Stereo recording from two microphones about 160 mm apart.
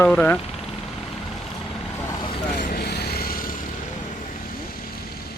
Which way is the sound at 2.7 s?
90° left.